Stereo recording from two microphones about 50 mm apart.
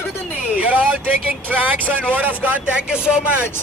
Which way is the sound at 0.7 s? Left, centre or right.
Right.